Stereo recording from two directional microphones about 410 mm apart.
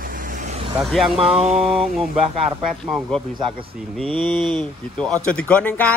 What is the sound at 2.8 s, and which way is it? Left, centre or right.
Speech, centre.